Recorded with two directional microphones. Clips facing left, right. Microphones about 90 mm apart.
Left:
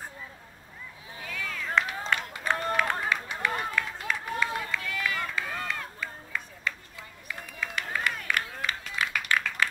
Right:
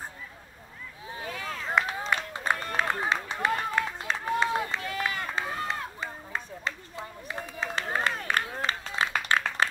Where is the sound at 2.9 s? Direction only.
25° right (ahead or behind).